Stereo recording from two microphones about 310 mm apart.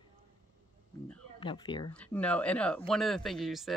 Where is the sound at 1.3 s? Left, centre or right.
Centre.